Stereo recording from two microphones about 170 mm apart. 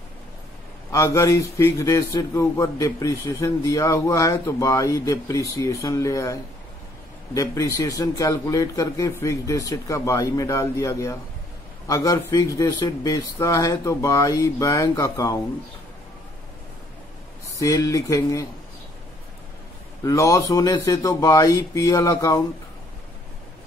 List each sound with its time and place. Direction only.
0.9 s a man's voice: 20° left (ahead or behind)
7.3 s a man's voice: 20° left (ahead or behind)
17.6 s a man's voice: 20° left (ahead or behind)
20.0 s a man's voice: 20° left (ahead or behind)